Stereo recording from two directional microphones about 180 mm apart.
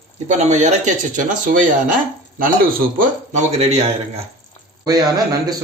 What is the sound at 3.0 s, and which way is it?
Speech, 40° right (ahead or behind).